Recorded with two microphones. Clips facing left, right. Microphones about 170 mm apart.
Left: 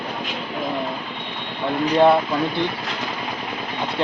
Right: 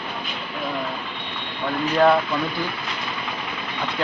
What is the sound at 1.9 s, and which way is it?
Speech, 25° left (ahead or behind).